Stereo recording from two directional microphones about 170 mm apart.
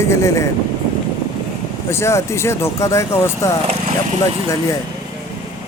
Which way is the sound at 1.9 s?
15° left (ahead or behind).